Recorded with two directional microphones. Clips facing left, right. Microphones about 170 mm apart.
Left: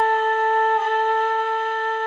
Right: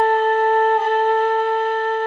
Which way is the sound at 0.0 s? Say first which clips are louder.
Right 4 dB; 30° right (ahead or behind).